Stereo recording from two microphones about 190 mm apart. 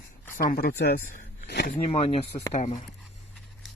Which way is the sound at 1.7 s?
30° left (ahead or behind).